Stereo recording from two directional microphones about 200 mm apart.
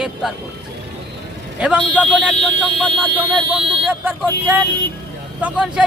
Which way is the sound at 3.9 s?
10° right (ahead or behind).